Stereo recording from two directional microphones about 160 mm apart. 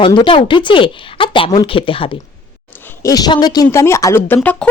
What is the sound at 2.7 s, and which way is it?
Speech, 15° left (ahead or behind).